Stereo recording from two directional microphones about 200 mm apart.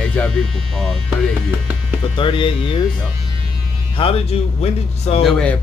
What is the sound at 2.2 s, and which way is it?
Speech, 25° left (ahead or behind).